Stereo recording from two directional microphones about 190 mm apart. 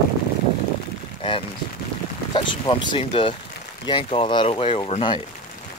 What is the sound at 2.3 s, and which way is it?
Speech, 25° left (ahead or behind).